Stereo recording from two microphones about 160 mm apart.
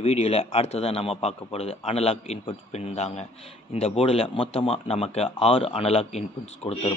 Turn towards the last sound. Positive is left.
turn(degrees=40)  # may be behind; listen again after turning